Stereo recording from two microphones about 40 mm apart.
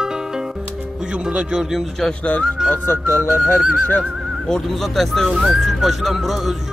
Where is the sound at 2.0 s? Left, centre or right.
Centre.